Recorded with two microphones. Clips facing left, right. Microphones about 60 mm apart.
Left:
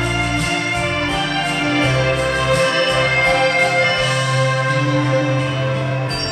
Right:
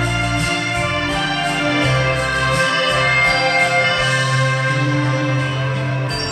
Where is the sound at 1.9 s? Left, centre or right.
Right.